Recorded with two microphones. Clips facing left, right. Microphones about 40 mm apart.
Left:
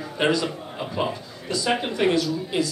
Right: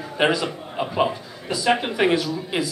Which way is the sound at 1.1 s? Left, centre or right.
Centre.